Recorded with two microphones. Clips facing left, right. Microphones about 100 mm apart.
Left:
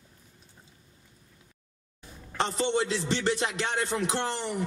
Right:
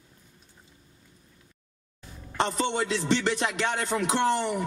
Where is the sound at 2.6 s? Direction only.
55° right (ahead or behind).